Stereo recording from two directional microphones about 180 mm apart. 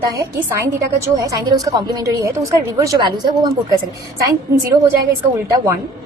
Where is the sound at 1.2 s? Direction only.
20° right (ahead or behind).